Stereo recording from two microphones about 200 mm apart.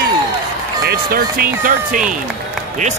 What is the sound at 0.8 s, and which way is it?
Speech, 50° right (ahead or behind).